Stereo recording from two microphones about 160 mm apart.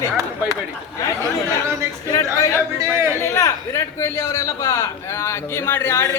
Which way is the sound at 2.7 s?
20° right (ahead or behind).